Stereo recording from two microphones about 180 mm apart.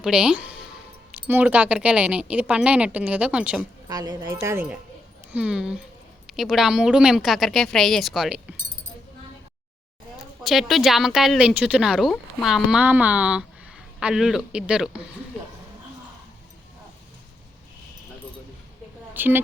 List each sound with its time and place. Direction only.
0.0 s speech: 5° right (ahead or behind)
3.8 s speech: 20° right (ahead or behind); by 8.4 s centre (ahead or behind)
10.4 s speech: centre (ahead or behind)
19.1 s a woman's voice: 10° right (ahead or behind)